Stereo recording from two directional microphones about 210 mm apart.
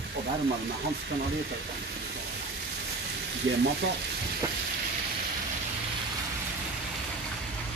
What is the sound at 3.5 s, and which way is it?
Speech, 65° right (ahead or behind).